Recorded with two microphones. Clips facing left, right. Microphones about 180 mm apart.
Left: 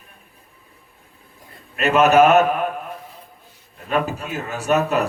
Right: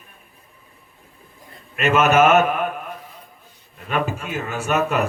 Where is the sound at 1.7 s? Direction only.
35° left (ahead or behind).